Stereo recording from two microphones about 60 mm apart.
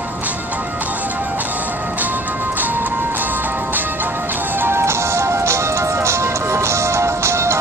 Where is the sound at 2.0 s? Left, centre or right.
Right.